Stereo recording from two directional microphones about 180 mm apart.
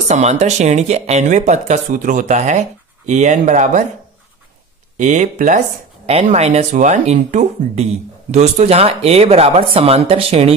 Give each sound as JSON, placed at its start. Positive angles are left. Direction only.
{"t": 0.1, "sound": "speech", "side_deg": -40}
{"t": 4.9, "sound": "speech", "side_deg": -45}